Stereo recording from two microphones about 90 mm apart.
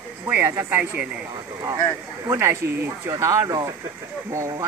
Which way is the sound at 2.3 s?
30° right (ahead or behind).